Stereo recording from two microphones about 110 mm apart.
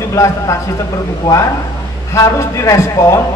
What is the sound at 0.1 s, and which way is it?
A man's voice, 30° left (ahead or behind).